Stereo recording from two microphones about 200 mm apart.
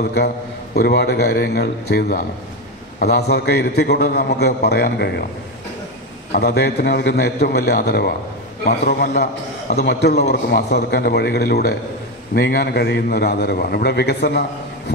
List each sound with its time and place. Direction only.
0.7 s a man's voice: 55° left (ahead or behind)
6.3 s a man's voice: 55° left (ahead or behind)